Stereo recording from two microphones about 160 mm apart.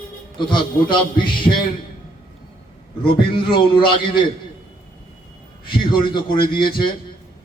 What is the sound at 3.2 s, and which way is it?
Speech, 30° left (ahead or behind).